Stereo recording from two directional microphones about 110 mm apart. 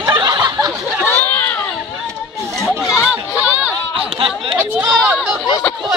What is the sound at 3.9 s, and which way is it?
Chatter, 55° right (ahead or behind).